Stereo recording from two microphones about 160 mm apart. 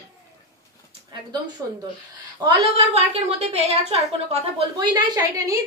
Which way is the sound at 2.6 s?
40° right (ahead or behind).